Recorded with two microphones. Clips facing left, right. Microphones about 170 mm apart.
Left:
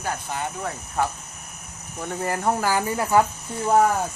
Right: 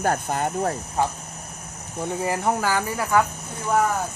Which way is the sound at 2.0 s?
10° right (ahead or behind).